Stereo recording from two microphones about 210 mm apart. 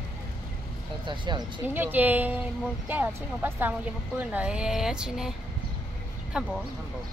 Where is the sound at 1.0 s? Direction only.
20° right (ahead or behind).